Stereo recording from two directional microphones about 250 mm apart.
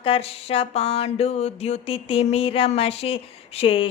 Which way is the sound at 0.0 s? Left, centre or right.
Left.